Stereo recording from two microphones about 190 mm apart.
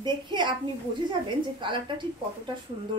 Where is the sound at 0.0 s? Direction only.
25° right (ahead or behind).